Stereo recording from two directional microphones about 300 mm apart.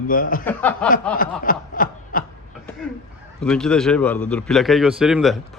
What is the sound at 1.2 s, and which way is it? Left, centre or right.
Snicker, left.